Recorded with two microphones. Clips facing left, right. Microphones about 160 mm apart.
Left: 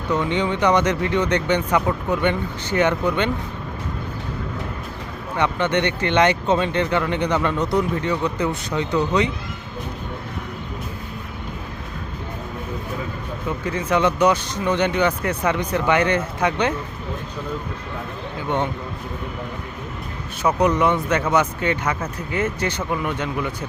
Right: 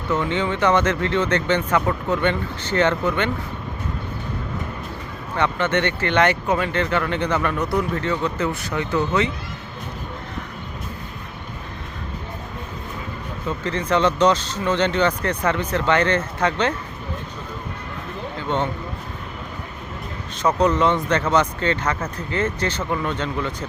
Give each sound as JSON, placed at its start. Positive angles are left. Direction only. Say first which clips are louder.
{"t": 0.1, "sound": "speech", "louder": "left 1 dB", "side_deg": 15}
{"t": 5.4, "sound": "speech", "louder": "even", "side_deg": 15}
{"t": 13.7, "sound": "speech", "louder": "even", "side_deg": 10}
{"t": 18.4, "sound": "speech", "louder": "even", "side_deg": 15}
{"t": 20.4, "sound": "speech", "louder": "even", "side_deg": 10}